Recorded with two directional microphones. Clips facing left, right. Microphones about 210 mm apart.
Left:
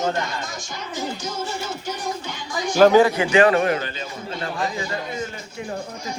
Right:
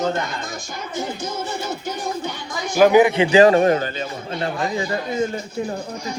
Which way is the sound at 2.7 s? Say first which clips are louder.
Right 1 dB; 15° right (ahead or behind).